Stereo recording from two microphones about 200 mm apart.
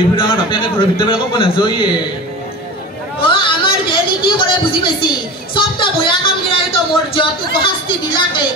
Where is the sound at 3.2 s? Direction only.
25° left (ahead or behind).